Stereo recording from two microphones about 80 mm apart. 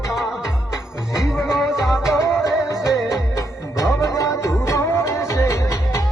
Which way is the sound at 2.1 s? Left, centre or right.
Left.